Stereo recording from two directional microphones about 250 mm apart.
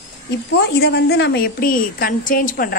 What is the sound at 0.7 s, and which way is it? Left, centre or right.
A woman's voice, left.